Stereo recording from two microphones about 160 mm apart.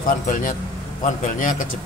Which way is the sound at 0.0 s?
55° left (ahead or behind).